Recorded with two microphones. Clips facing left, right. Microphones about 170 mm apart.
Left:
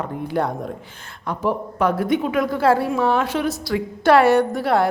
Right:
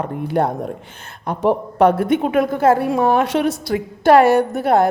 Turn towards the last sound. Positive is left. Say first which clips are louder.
# right 3 dB
turn(degrees=-50)  # may be behind; listen again after turning